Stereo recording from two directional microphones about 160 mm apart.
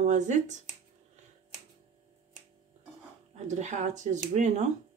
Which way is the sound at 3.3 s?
45° right (ahead or behind).